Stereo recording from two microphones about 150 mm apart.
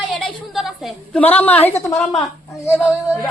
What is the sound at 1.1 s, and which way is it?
Speech, 10° left (ahead or behind).